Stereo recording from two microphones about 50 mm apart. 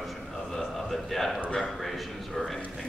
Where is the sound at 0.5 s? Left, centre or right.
Centre.